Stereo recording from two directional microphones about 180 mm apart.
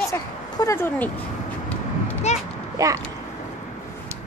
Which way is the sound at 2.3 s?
40° left (ahead or behind).